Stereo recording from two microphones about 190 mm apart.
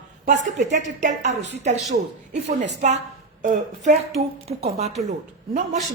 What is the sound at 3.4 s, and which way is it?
A woman's voice, 40° right (ahead or behind).